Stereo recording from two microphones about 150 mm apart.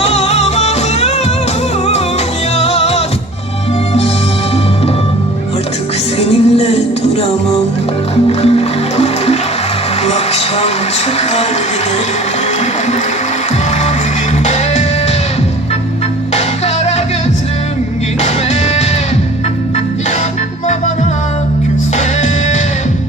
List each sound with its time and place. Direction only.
0.0 s music: 45° left (ahead or behind)
2.6 s music: 45° left (ahead or behind)
6.1 s music: 45° left (ahead or behind)
8.3 s music: 45° left (ahead or behind)
14.4 s music: 50° left (ahead or behind)
16.3 s music: 45° left (ahead or behind)
18.2 s music: 45° left (ahead or behind)
21.9 s music: 55° left (ahead or behind)